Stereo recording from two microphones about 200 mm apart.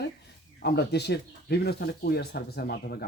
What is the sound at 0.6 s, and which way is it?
Speech, 55° left (ahead or behind).